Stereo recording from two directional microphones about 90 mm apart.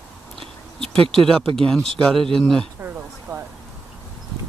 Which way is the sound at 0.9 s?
5° left (ahead or behind).